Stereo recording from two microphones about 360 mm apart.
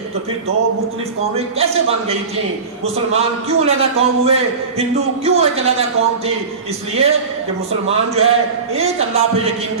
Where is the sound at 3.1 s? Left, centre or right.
Centre.